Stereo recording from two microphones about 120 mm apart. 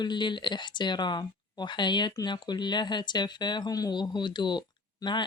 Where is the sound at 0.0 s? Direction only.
40° left (ahead or behind).